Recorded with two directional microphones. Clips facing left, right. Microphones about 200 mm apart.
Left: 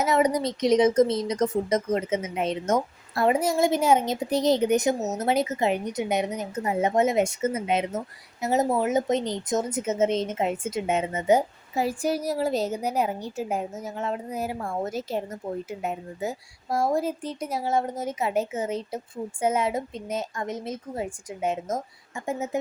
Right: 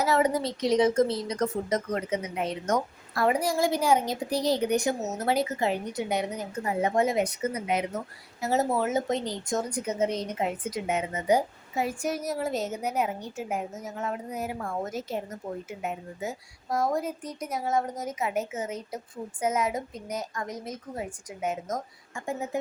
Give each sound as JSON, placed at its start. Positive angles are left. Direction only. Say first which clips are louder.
{"t": 0.0, "sound": "a woman's voice", "louder": "left 2 dB", "side_deg": 20}